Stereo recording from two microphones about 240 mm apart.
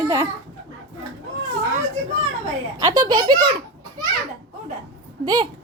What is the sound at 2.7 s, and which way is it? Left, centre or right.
Speech, centre.